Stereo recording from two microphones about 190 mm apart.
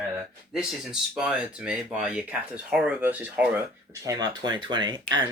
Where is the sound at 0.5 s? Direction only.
5° right (ahead or behind).